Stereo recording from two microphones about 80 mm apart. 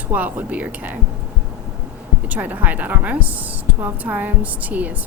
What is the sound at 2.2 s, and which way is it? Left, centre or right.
A woman's voice, centre.